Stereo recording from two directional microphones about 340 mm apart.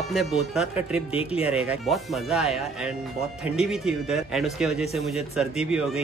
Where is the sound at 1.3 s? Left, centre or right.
Centre.